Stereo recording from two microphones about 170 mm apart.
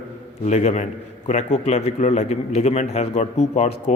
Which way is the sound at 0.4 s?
40° left (ahead or behind).